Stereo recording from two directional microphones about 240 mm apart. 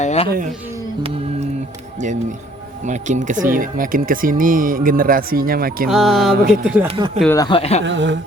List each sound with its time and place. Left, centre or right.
0.0 s music: left
0.3 s speech: right
1.0 s music: right
2.8 s speech: right
5.9 s music: centre
6.8 s speech: centre
7.3 s speech: centre
7.9 s speech: right